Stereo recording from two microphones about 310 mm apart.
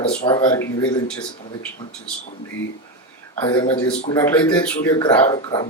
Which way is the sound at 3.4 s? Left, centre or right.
Centre.